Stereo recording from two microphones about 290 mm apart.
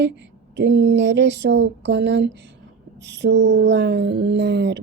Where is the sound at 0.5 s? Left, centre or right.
Right.